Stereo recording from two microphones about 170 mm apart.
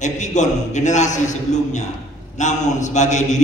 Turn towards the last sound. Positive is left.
turn(degrees=45)  # may be behind; listen again after turning